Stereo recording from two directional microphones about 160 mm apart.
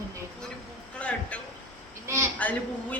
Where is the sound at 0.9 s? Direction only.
5° left (ahead or behind).